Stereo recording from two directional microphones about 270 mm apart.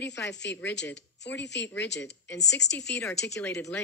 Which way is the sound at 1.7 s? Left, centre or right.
Left.